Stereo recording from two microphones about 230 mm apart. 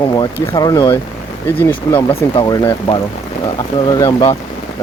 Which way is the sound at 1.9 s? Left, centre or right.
Centre.